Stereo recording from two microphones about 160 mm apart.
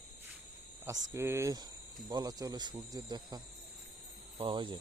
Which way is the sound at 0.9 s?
15° right (ahead or behind).